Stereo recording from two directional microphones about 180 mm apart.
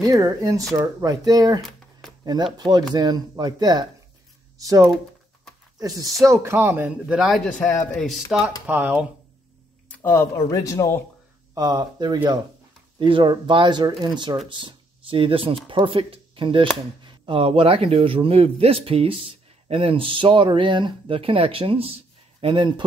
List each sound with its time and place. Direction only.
0.0 s speech: 20° right (ahead or behind)
1.6 s a sound: centre (ahead or behind)
2.2 s speech: 20° right (ahead or behind); by 8.2 s centre (ahead or behind)
8.6 s speech: 10° right (ahead or behind)
9.8 s speech: 10° left (ahead or behind)
11.5 s speech: 20° right (ahead or behind)